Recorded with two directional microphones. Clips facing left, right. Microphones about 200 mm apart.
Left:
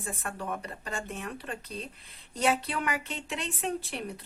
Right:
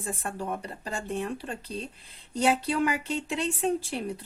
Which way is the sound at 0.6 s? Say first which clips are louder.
Right 2 dB; 30° right (ahead or behind).